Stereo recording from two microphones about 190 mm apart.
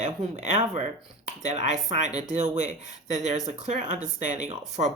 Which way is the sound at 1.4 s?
40° right (ahead or behind).